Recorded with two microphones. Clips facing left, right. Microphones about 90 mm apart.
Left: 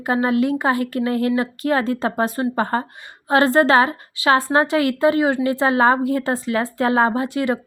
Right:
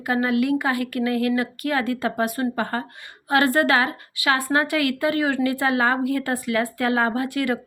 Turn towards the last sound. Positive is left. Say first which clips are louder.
# left 3 dB
turn(degrees=25)  # may be behind; listen again after turning